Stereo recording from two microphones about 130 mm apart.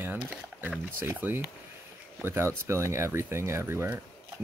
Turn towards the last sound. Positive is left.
turn(degrees=-20)  # may be behind; listen again after turning